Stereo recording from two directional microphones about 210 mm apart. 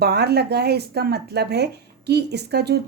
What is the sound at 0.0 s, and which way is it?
Speech, 50° right (ahead or behind).